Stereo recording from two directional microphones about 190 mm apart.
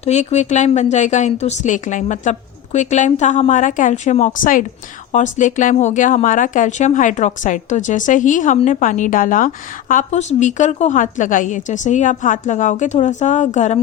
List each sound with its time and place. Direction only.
0.0 s speech: 35° left (ahead or behind)